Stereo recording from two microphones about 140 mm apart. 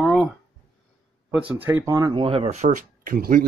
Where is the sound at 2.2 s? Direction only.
45° right (ahead or behind); by 3.4 s 90° right.